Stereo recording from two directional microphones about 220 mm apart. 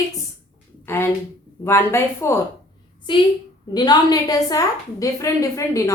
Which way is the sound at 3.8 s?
15° left (ahead or behind).